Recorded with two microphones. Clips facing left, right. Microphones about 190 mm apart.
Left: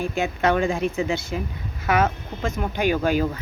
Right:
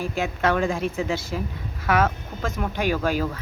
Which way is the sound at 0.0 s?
Centre (ahead or behind).